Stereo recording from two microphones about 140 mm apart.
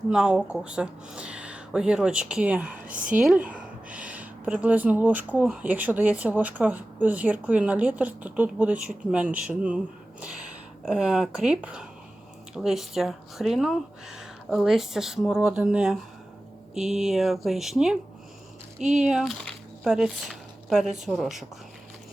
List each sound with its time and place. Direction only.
0.1 s speech: 5° right (ahead or behind)
3.0 s speech: 70° right (ahead or behind)
3.2 s speech: 10° right (ahead or behind)
19.0 s speech: centre (ahead or behind)